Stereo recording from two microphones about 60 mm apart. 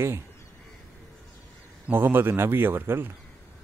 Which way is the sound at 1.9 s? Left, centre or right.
Right.